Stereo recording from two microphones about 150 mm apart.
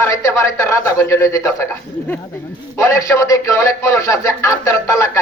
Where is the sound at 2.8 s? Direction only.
20° left (ahead or behind).